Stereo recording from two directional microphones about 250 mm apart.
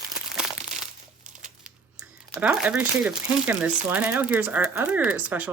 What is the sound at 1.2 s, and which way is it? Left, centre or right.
Crumpling, right.